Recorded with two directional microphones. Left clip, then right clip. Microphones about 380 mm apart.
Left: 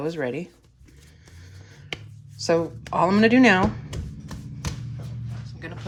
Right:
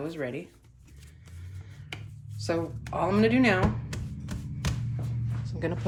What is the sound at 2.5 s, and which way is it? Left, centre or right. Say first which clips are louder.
Speech: left 8 dB; centre.